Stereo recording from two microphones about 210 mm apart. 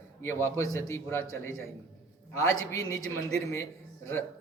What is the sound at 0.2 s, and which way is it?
A man's voice, 10° left (ahead or behind).